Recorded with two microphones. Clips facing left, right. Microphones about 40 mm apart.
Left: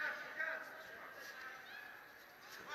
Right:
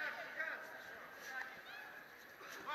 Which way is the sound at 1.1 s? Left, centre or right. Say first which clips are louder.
Right 3 dB; right.